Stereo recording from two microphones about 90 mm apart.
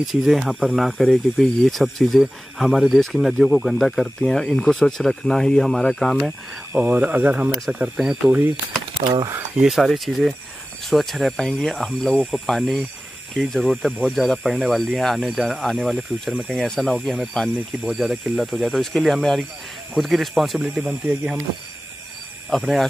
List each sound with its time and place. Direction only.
0.0 s speech: centre (ahead or behind)
6.7 s speech: 20° right (ahead or behind)
9.6 s speech: centre (ahead or behind)
22.5 s speech: centre (ahead or behind)